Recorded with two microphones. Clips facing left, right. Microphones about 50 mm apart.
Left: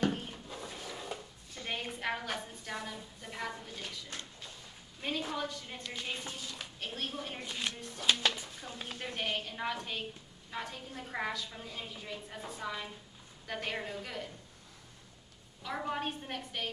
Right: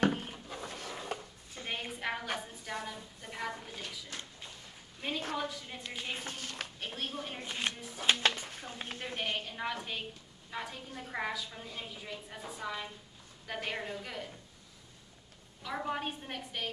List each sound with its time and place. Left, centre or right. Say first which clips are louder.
0.1 s a sound: right 1 dB; centre
0.8 s a sound: right 1 dB; right
1.1 s chopping: right 2 dB; centre
1.7 s a sound: left 1 dB; centre
2.3 s a woman's voice: right 1 dB; centre
5.0 s a woman's voice: even; centre
6.1 s speech: right 2 dB; right
6.8 s a woman's voice: left 2 dB; centre
7.4 s speech: right 2 dB; right
8.4 s a sound: right 2 dB; right
8.6 s speech: left 1 dB; right
9.0 s a woman's voice: even; centre
15.6 s a woman's voice: even; centre